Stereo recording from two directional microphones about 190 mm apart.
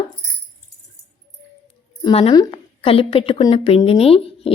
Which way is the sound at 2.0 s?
30° left (ahead or behind).